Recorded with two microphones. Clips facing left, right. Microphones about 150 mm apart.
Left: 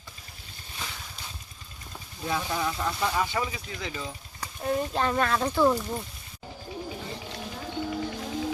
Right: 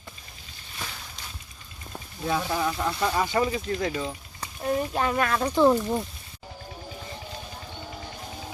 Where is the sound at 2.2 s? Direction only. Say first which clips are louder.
Right 3 dB; 15° right (ahead or behind).